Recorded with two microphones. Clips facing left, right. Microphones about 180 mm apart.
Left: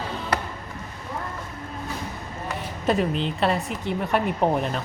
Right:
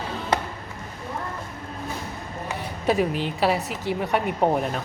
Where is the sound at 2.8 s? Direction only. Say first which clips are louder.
Even; 5° right (ahead or behind).